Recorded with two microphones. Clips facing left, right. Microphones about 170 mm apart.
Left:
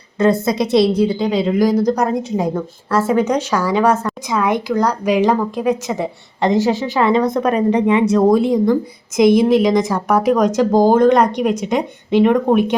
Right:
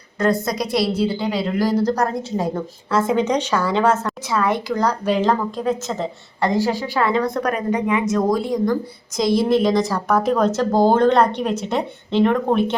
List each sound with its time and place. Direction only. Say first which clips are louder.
0.2 s a woman's voice: left 5 dB; 25° left (ahead or behind)